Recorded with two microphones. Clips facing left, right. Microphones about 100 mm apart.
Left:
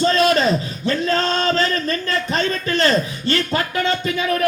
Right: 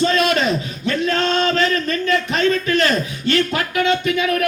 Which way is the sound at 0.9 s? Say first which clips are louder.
Even; 35° left (ahead or behind).